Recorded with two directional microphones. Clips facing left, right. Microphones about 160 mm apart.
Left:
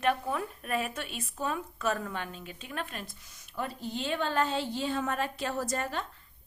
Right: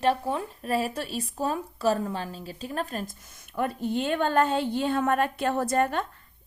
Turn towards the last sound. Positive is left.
turn(degrees=-55)  # may be behind; listen again after turning